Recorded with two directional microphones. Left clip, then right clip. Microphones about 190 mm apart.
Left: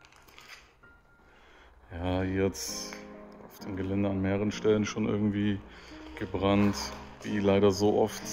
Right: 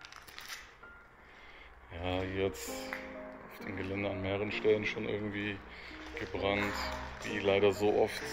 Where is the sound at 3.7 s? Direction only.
40° left (ahead or behind).